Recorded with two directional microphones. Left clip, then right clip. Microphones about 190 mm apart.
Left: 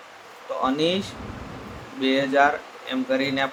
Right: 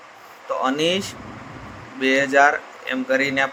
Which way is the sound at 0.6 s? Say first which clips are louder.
Right 2 dB; 25° right (ahead or behind).